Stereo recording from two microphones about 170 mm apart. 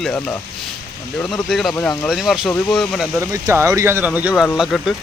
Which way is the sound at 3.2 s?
15° right (ahead or behind).